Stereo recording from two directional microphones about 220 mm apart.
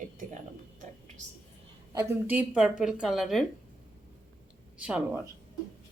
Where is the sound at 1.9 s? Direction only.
10° right (ahead or behind).